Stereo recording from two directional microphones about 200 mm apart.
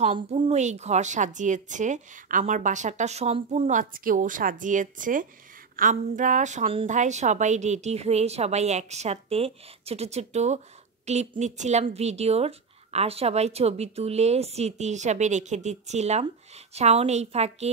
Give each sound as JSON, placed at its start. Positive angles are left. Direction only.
{"t": 0.0, "sound": "speech", "side_deg": -30}
{"t": 3.7, "sound": "speech", "side_deg": -45}